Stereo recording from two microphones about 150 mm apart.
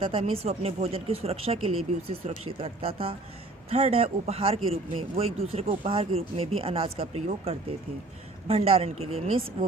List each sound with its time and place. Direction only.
0.0 s speech: 40° right (ahead or behind)